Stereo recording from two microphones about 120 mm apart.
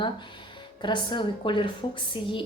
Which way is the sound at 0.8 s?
40° left (ahead or behind).